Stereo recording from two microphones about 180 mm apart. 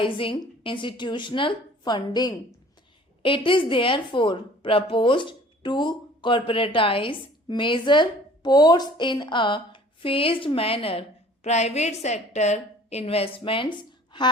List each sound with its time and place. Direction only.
0.0 s a woman's voice: 30° left (ahead or behind)